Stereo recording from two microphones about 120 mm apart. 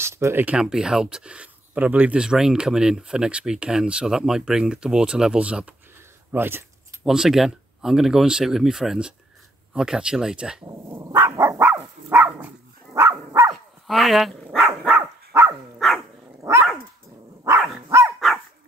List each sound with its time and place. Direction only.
0.0 s speech: 20° right (ahead or behind)
0.6 s speech: 5° right (ahead or behind)
7.1 s speech: 5° right (ahead or behind)
10.6 s dog: 25° right (ahead or behind)
13.5 s dog: centre (ahead or behind)
14.9 s dog: 20° right (ahead or behind)
17.8 s dog: 25° right (ahead or behind)